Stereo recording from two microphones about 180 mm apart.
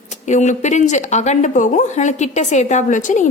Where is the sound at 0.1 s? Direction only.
40° left (ahead or behind).